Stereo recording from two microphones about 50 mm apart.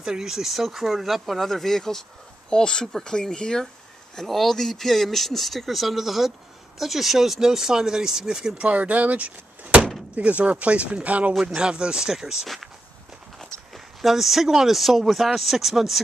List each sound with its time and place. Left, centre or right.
0.0 s speech: centre
8.6 s speech: right
11.4 s speech: centre